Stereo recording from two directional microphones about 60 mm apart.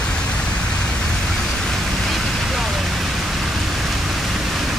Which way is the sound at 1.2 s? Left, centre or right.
Centre.